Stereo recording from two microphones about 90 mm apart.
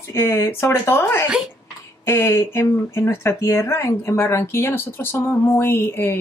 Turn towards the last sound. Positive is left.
turn(degrees=25)  # may be behind; listen again after turning